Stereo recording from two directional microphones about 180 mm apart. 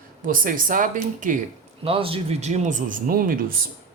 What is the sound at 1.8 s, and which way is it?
Speech, 30° right (ahead or behind).